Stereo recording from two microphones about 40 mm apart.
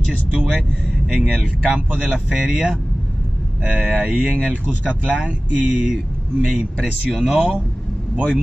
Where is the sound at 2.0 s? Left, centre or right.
Right.